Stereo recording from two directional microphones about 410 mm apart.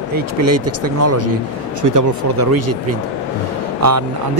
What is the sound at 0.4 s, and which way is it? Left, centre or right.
Speech, right.